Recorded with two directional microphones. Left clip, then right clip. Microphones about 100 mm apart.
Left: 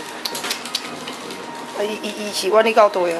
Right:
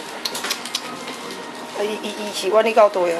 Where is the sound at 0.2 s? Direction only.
Centre (ahead or behind).